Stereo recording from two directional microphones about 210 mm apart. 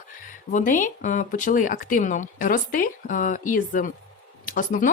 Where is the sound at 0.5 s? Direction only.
40° left (ahead or behind).